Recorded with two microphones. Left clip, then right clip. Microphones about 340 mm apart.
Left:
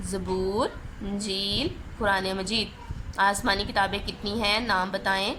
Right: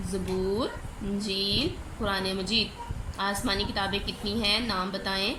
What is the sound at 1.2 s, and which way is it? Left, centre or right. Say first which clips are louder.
A woman's voice: even; left.